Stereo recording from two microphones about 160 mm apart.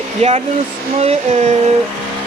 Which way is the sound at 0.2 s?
45° right (ahead or behind).